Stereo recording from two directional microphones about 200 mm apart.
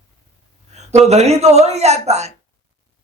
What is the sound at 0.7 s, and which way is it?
Speech, 35° right (ahead or behind).